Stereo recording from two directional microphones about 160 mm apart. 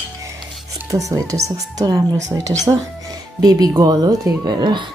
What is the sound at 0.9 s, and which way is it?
Speech, 20° right (ahead or behind).